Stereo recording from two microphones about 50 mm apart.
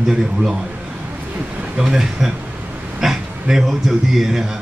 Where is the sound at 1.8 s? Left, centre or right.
Centre.